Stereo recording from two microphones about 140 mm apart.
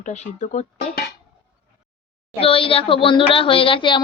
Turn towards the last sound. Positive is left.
turn(degrees=35)  # may be behind; listen again after turning